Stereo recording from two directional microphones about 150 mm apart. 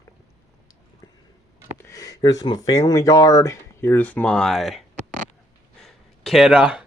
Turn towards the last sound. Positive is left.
turn(degrees=-5)  # may be behind; listen again after turning